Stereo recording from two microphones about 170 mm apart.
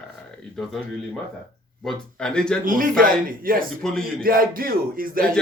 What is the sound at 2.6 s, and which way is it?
Speech, 55° right (ahead or behind).